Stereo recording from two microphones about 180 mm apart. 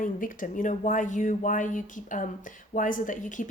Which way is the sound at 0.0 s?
50° left (ahead or behind).